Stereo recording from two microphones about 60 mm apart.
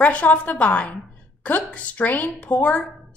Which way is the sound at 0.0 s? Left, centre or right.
Left.